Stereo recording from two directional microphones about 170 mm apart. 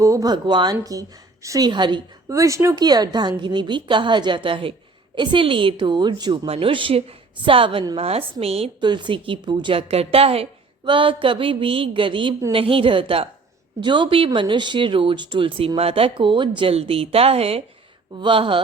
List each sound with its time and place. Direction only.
0.0 s a woman's voice: 20° right (ahead or behind)